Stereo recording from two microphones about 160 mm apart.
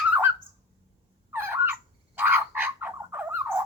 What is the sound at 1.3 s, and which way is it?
Fowl, 15° right (ahead or behind).